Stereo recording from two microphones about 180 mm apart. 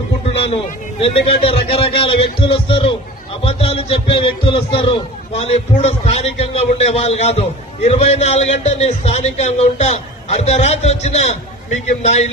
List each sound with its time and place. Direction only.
1.0 s speech: 30° left (ahead or behind)